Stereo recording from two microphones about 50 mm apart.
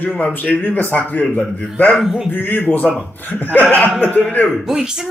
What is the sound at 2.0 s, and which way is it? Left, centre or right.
Speech, centre.